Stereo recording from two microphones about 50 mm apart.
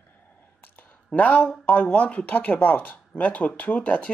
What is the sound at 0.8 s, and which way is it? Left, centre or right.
Speech, left.